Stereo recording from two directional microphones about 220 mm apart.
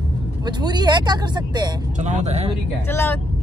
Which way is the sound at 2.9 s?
10° left (ahead or behind).